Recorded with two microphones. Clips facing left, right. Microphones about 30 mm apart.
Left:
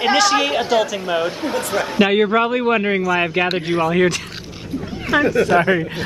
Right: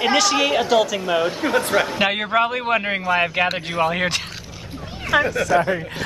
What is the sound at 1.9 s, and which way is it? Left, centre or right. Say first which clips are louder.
Speech: left 4 dB; centre.